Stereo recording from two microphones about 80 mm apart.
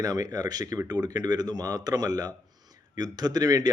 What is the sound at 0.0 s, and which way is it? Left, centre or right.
Speech, right.